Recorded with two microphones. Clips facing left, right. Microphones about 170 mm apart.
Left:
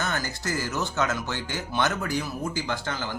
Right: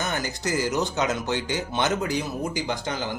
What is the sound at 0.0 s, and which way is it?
Speech, 15° right (ahead or behind).